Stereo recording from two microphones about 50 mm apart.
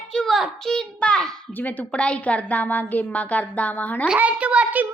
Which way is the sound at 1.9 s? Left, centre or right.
Left.